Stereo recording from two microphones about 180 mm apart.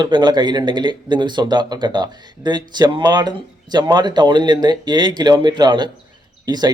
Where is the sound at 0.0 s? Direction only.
25° right (ahead or behind).